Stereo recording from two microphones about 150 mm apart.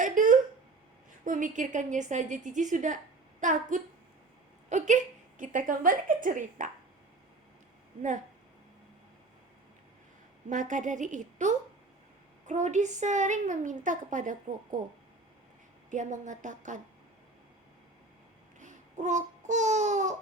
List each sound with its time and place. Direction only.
0.0 s a sound: 60° right (ahead or behind)
1.2 s a woman's voice: 60° right (ahead or behind)
5.4 s a woman's voice: 60° right (ahead or behind)
10.5 s a woman's voice: 60° right (ahead or behind)
15.9 s a woman's voice: 55° right (ahead or behind)
18.6 s babbling: 55° right (ahead or behind)